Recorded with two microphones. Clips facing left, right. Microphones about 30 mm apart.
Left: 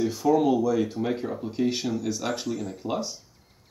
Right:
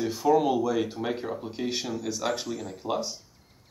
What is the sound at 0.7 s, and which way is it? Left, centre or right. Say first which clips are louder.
Speech: left 2 dB; right.